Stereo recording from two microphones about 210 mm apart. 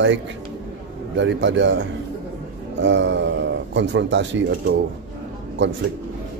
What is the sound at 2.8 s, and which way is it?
Speech, 60° right (ahead or behind).